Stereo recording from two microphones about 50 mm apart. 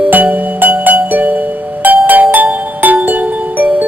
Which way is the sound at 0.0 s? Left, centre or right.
Right.